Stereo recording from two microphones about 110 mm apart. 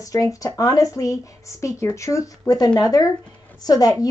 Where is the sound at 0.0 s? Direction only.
30° left (ahead or behind).